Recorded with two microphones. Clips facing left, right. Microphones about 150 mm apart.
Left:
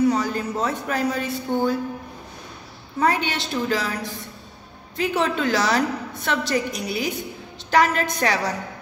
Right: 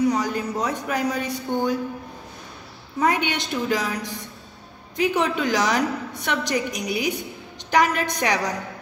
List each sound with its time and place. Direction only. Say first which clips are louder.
0.0 s speech: left 1 dB; 15° right (ahead or behind)
3.0 s a woman's voice: even; 15° right (ahead or behind)
5.2 s a woman's voice: even; 15° right (ahead or behind)